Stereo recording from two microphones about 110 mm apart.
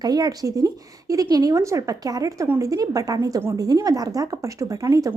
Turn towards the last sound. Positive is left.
turn(degrees=-30)  # may be behind; listen again after turning